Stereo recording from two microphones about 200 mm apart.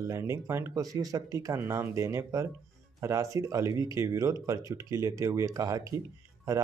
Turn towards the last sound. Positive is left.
turn(degrees=-15)  # may be behind; listen again after turning